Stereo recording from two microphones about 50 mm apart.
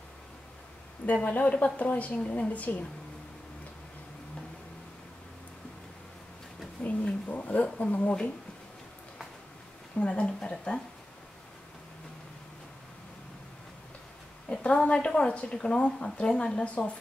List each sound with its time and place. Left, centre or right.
1.0 s a woman's voice: left
6.8 s a woman's voice: left
9.9 s a woman's voice: centre
14.5 s a woman's voice: left